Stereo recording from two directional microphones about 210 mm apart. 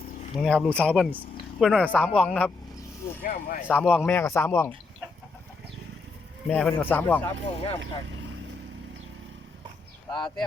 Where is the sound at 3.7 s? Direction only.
5° left (ahead or behind).